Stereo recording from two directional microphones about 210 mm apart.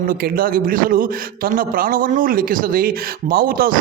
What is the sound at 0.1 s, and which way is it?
A man's voice, 45° right (ahead or behind).